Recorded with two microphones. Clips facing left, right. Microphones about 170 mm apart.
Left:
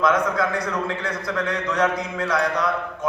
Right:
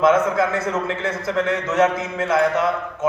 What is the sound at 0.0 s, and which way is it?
A man's voice, 25° right (ahead or behind).